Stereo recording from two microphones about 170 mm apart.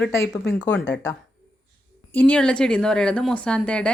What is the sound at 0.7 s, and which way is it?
Speech, 90° left.